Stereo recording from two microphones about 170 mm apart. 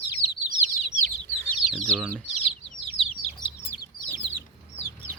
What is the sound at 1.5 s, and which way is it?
Chicken, centre (ahead or behind).